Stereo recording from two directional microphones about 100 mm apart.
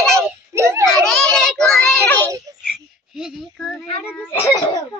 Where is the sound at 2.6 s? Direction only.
5° right (ahead or behind).